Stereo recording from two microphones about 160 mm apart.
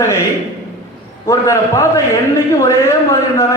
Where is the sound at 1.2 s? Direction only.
20° left (ahead or behind).